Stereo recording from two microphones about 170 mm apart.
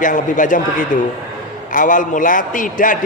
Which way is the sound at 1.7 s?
50° left (ahead or behind).